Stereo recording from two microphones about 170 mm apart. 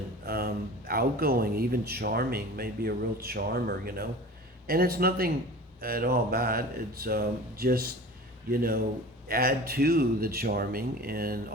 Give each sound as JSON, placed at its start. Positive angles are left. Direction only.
{"t": 0.3, "sound": "speech", "side_deg": -65}